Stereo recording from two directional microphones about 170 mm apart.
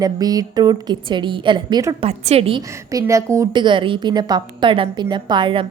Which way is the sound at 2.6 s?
20° right (ahead or behind).